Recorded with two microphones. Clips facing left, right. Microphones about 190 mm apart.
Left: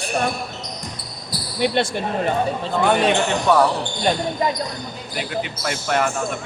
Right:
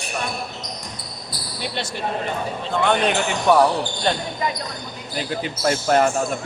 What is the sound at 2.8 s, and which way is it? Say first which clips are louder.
Speech: left 2 dB; 5° left (ahead or behind).